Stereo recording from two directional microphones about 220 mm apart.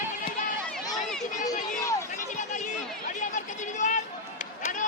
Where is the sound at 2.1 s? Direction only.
35° left (ahead or behind).